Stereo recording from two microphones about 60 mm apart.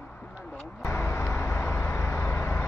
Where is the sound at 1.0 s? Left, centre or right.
Left.